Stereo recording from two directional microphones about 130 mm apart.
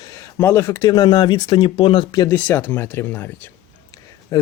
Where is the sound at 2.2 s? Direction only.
15° left (ahead or behind).